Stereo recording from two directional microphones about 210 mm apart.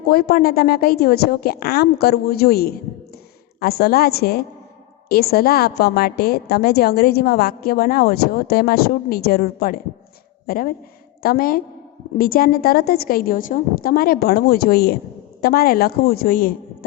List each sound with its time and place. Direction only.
0.1 s a woman's voice: 45° left (ahead or behind)